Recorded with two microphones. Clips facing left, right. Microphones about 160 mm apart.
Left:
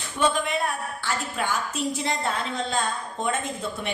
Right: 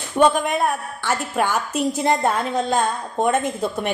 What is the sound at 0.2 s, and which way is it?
Speech, 50° right (ahead or behind).